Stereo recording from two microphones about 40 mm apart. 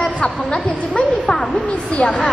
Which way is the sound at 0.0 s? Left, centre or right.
Left.